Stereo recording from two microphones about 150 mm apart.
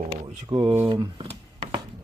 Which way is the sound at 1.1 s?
35° right (ahead or behind).